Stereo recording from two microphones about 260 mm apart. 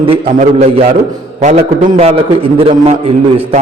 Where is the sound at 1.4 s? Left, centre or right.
Right.